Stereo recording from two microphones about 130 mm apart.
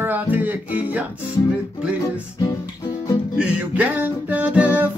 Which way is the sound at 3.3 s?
10° right (ahead or behind).